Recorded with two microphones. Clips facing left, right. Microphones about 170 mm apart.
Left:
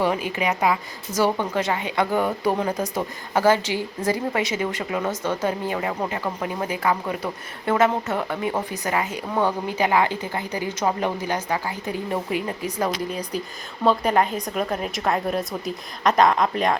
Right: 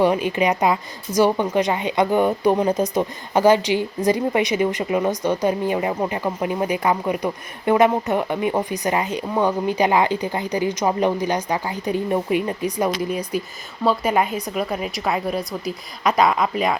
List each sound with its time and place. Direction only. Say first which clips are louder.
0.0 s a woman's voice: right 5 dB; 20° right (ahead or behind)